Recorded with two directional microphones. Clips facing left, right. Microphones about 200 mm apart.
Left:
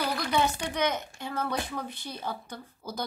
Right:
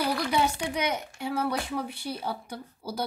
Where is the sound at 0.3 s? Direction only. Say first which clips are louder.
Right 1 dB; 10° right (ahead or behind).